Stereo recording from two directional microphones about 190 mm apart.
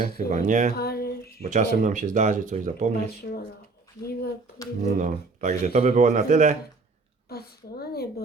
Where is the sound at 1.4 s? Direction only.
40° right (ahead or behind).